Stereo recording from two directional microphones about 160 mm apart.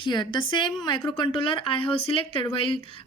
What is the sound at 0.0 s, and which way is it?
A woman's voice, 30° left (ahead or behind).